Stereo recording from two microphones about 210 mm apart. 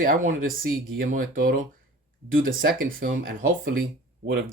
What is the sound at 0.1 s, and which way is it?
Speech, 40° right (ahead or behind).